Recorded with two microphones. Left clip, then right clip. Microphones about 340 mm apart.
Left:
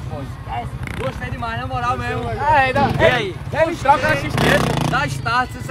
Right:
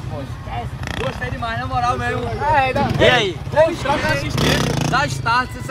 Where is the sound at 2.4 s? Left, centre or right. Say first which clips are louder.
Left 2 dB; left.